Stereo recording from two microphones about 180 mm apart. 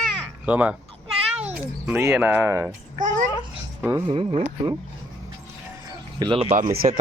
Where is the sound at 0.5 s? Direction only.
10° right (ahead or behind).